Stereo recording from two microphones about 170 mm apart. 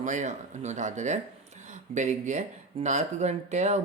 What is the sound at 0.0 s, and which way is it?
Speech, 45° right (ahead or behind).